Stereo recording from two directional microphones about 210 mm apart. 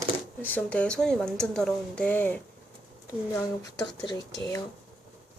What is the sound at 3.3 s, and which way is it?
Speech, 20° left (ahead or behind).